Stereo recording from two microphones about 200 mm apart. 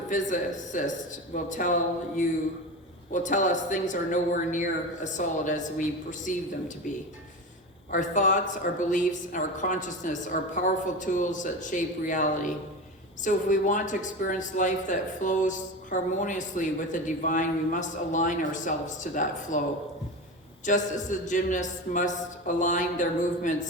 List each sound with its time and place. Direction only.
0.1 s speech: 40° left (ahead or behind)
7.9 s speech: 40° left (ahead or behind)
20.7 s speech: 40° left (ahead or behind)